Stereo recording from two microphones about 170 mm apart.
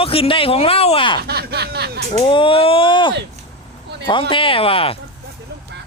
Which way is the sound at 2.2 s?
30° left (ahead or behind).